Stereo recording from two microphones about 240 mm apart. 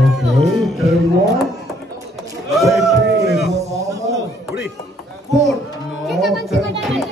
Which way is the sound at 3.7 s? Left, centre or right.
Centre.